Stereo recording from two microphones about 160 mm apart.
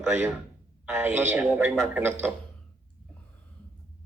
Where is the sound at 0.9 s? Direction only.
15° right (ahead or behind).